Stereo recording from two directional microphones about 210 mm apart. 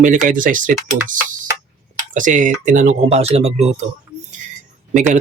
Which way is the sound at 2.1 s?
40° right (ahead or behind).